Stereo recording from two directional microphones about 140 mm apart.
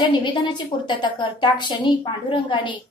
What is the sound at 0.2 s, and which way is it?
A woman's voice, 35° left (ahead or behind).